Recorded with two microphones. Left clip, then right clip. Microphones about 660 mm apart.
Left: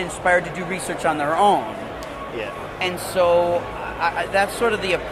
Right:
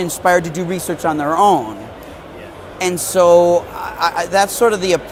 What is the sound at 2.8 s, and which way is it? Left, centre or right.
Speech, right.